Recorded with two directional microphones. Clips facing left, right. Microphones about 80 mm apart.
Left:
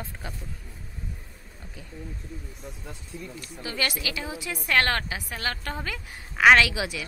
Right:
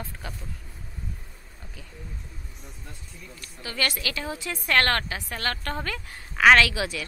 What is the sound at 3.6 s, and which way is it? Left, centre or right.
A woman's voice, centre.